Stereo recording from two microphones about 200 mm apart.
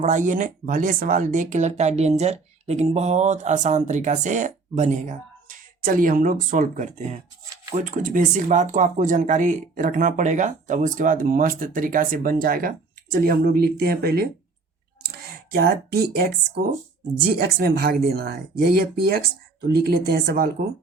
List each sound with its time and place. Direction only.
0.0 s speech: 40° right (ahead or behind)
7.5 s a sound: 20° right (ahead or behind)
7.9 s speech: 40° right (ahead or behind)
15.5 s speech: 50° right (ahead or behind)